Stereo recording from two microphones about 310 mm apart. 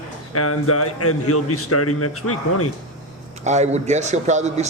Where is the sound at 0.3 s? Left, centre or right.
Left.